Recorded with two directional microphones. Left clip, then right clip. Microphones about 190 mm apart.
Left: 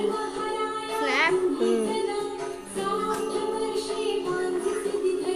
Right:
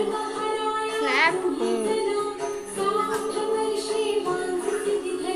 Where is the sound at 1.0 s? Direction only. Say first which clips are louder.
Right 2 dB; 15° left (ahead or behind).